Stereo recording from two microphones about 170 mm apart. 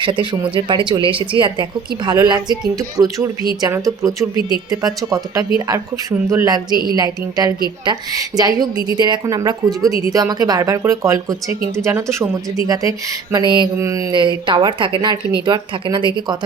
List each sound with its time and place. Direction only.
0.0 s speech: 30° right (ahead or behind)